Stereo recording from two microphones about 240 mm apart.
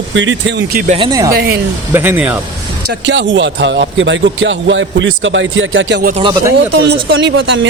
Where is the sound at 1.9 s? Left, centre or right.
Centre.